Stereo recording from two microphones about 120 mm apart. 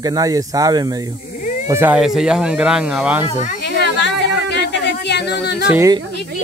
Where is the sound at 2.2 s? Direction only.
5° right (ahead or behind).